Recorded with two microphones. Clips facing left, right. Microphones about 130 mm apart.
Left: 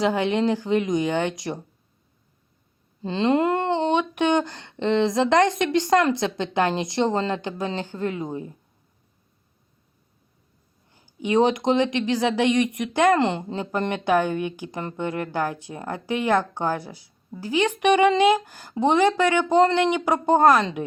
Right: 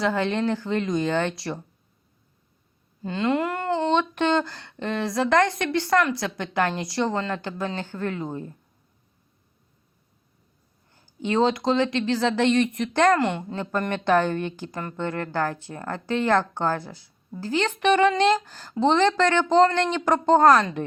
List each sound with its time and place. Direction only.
0.0 s speech: 15° left (ahead or behind)
3.0 s speech: 25° left (ahead or behind)
10.9 s speech: 15° left (ahead or behind)
13.1 s speech: 25° left (ahead or behind); by 20.7 s 10° left (ahead or behind)